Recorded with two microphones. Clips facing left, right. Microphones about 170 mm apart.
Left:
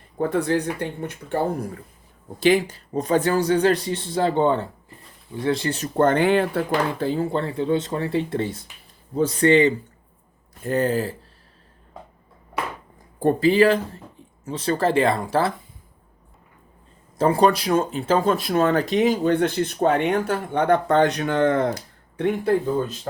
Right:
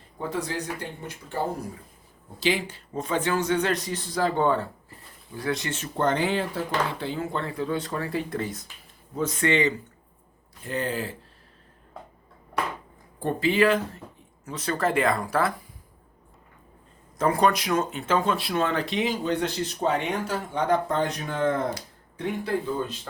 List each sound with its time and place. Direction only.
0.2 s speech: 60° left (ahead or behind)
2.4 s speech: 45° left (ahead or behind)
7.0 s speech: 35° left (ahead or behind)
13.1 s speech: 40° left (ahead or behind)
17.2 s speech: 30° left (ahead or behind); by 21.7 s 75° left (ahead or behind)
22.2 s speech: 50° left (ahead or behind)